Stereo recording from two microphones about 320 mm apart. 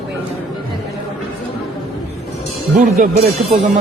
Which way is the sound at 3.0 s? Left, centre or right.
Right.